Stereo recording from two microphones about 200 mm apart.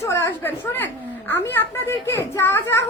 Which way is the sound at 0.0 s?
10° left (ahead or behind).